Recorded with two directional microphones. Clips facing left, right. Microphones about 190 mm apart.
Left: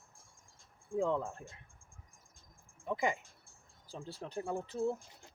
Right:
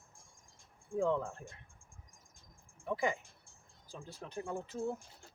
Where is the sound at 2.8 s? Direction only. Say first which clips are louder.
Even; 20° left (ahead or behind).